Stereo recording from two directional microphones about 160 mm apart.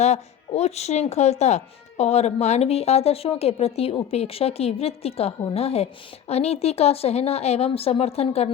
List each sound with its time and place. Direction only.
0.0 s speech: 45° left (ahead or behind)